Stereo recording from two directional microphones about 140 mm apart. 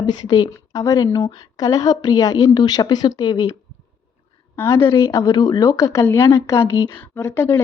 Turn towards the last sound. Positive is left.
turn(degrees=15)  # may be behind; listen again after turning